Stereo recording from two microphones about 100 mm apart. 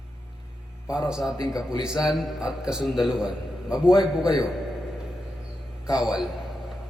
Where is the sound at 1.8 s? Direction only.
5° right (ahead or behind).